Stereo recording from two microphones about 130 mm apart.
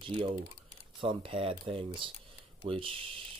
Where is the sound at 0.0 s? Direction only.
40° right (ahead or behind).